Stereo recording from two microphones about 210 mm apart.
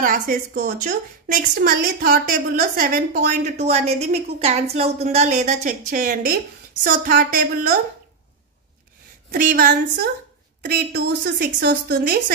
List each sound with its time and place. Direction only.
0.0 s a woman's voice: 40° right (ahead or behind)
9.3 s a woman's voice: 40° right (ahead or behind)